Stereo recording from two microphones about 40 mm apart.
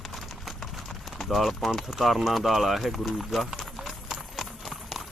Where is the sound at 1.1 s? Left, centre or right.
Centre.